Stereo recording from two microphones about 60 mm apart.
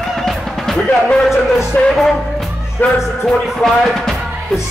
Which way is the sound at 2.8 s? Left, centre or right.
Left.